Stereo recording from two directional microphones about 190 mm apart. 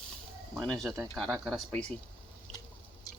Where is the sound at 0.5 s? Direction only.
5° left (ahead or behind).